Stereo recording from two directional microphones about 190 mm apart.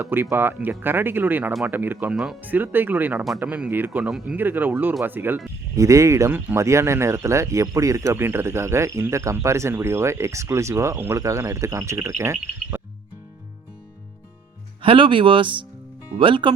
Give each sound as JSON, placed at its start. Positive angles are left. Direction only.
{"t": 0.0, "sound": "speech", "side_deg": -10}
{"t": 14.8, "sound": "speech", "side_deg": -30}